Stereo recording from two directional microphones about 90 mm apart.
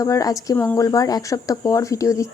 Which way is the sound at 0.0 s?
40° left (ahead or behind).